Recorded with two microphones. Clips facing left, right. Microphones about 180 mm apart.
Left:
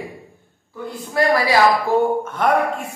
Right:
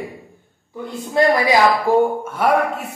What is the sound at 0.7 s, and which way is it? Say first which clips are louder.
A woman's voice: right 3 dB; 20° right (ahead or behind).